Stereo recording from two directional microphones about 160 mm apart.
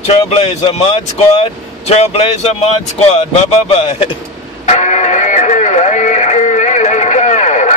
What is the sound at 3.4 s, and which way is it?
Speech, 40° left (ahead or behind).